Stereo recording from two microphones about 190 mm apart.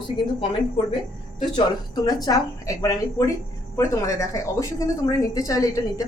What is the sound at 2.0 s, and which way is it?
A woman's voice, 20° left (ahead or behind).